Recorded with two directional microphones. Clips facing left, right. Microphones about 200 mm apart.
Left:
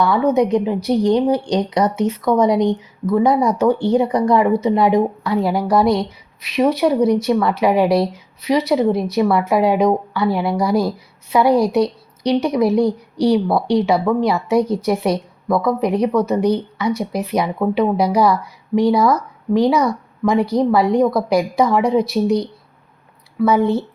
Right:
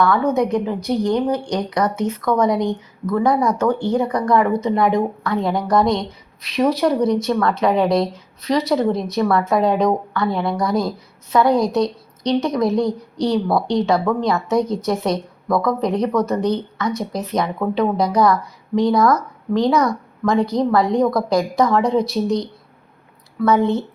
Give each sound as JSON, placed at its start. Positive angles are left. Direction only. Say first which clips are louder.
{"t": 0.0, "sound": "a woman's voice", "louder": "left 2 dB", "side_deg": 15}